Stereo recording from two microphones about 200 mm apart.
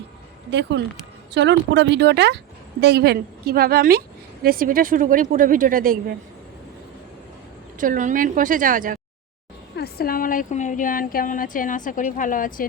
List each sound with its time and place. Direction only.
0.8 s speech: 55° right (ahead or behind)
7.8 s speech: 40° right (ahead or behind)
9.7 s speech: 50° left (ahead or behind)